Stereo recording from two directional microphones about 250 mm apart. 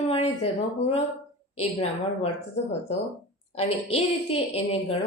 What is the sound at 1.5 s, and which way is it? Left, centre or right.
Speech, left.